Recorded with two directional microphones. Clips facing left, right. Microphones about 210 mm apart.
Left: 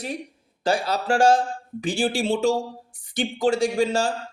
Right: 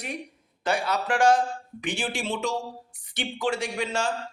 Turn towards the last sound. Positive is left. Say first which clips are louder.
# left 7 dB
turn(degrees=30)  # may be behind; listen again after turning